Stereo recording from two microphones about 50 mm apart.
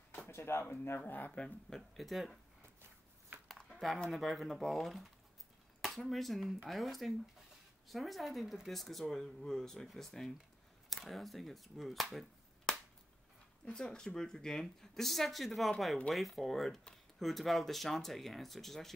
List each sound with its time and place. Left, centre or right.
0.3 s speech: left
1.3 s speech: centre
2.0 s speech: centre
4.1 s speech: centre
12.7 s finger snapping: centre
13.7 s speech: centre